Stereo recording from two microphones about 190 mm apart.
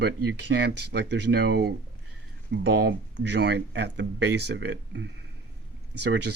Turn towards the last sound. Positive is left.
turn(degrees=-65)  # may be behind; listen again after turning